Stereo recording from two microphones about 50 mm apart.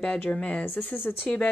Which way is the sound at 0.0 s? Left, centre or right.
Centre.